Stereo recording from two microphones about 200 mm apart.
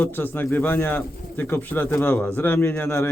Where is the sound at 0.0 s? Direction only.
10° left (ahead or behind).